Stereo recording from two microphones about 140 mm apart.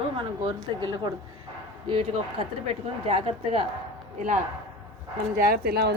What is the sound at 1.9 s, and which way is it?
A woman's voice, 40° right (ahead or behind).